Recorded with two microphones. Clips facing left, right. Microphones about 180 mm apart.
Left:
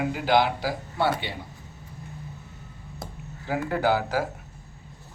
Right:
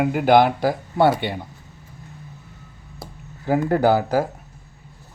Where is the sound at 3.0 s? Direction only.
Centre (ahead or behind).